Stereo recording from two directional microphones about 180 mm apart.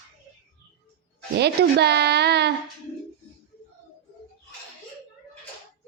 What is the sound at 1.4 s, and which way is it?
A woman's voice, 65° right (ahead or behind).